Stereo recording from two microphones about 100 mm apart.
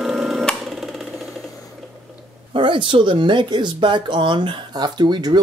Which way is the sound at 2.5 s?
60° right (ahead or behind).